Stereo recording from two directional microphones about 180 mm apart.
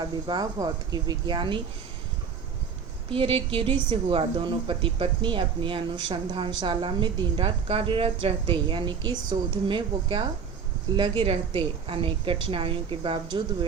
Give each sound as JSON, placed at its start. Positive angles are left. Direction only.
{"t": 0.0, "sound": "speech", "side_deg": -20}
{"t": 3.1, "sound": "speech", "side_deg": -30}